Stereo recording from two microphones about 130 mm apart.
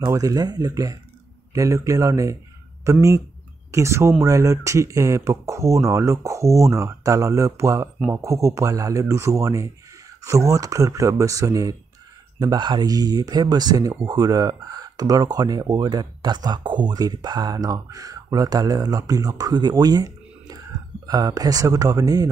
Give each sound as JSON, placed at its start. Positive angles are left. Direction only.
{"t": 0.1, "sound": "speech", "side_deg": -30}